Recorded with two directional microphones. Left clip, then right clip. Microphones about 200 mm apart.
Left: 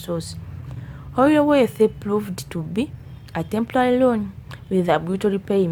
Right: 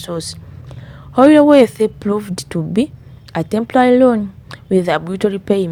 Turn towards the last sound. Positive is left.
turn(degrees=-25)  # may be behind; listen again after turning